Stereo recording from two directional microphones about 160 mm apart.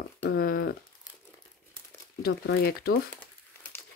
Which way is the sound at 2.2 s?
75° left (ahead or behind).